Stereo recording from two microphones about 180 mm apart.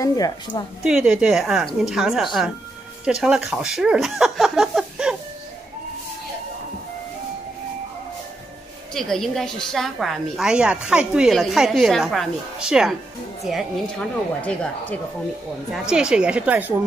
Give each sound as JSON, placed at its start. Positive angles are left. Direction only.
{"t": 0.0, "sound": "a woman's voice", "side_deg": 20}
{"t": 0.8, "sound": "a woman's voice", "side_deg": -5}
{"t": 8.9, "sound": "a woman's voice", "side_deg": 0}
{"t": 15.7, "sound": "a woman's voice", "side_deg": -5}